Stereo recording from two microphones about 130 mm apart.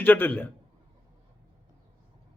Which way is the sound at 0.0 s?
15° left (ahead or behind).